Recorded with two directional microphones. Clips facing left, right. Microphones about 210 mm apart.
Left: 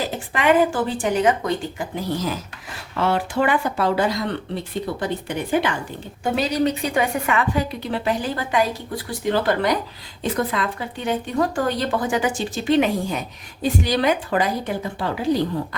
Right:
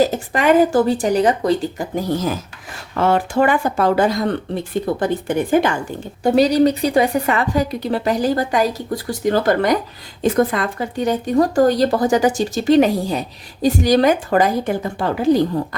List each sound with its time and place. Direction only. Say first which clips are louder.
0.0 s speech: right 6 dB; 40° right (ahead or behind)